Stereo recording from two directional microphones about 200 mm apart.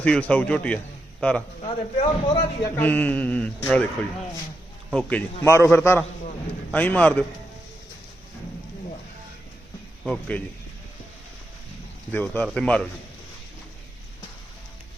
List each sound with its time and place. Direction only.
0.0 s a man's voice: 5° left (ahead or behind)
1.6 s a man's voice: 25° left (ahead or behind)
2.6 s a man's voice: 10° left (ahead or behind)
10.1 s speech: 5° left (ahead or behind)
12.1 s a man's voice: 10° left (ahead or behind)